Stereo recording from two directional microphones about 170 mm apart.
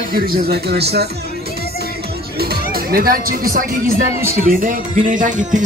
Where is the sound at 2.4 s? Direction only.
65° right (ahead or behind).